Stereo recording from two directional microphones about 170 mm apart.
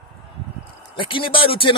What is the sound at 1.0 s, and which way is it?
Speech, 30° left (ahead or behind).